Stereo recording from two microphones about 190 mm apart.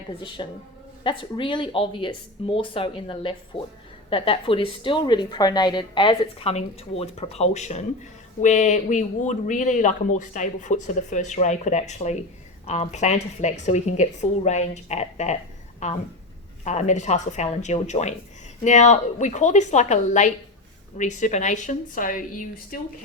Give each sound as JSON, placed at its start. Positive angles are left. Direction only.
{"t": 0.2, "sound": "a woman's voice", "side_deg": 25}